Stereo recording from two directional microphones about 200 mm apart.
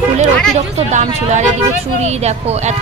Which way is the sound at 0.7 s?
35° right (ahead or behind).